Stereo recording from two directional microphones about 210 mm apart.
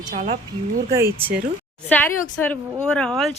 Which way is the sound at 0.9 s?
10° right (ahead or behind).